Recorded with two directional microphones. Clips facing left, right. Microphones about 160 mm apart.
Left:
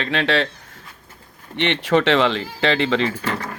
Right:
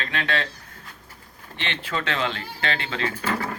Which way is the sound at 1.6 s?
70° left (ahead or behind).